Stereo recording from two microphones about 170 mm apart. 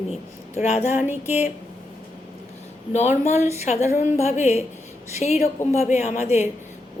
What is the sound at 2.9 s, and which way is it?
A woman's voice, 40° left (ahead or behind).